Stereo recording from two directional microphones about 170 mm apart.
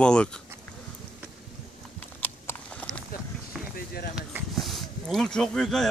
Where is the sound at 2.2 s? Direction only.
10° left (ahead or behind).